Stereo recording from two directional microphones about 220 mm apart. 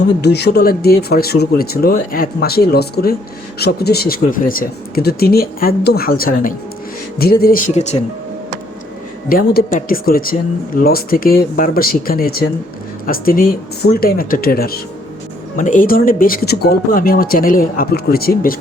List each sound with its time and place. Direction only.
0.2 s speech: 50° left (ahead or behind)
9.3 s speech: 40° left (ahead or behind)